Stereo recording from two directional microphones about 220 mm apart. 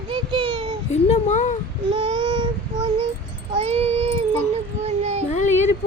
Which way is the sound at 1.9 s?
20° right (ahead or behind).